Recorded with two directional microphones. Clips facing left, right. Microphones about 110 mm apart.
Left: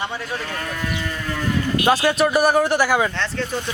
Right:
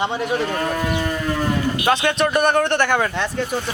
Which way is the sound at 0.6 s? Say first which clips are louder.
Right 6 dB; 35° right (ahead or behind).